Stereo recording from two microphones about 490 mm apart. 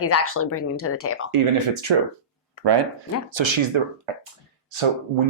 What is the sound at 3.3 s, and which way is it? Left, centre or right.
Speech, right.